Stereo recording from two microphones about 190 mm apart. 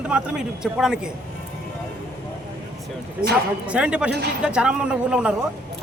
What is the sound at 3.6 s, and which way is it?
Speech, 5° right (ahead or behind).